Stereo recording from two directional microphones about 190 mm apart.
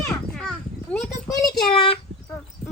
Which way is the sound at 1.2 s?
20° left (ahead or behind).